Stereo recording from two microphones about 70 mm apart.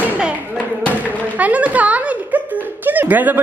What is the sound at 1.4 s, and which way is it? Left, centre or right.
Speech, right.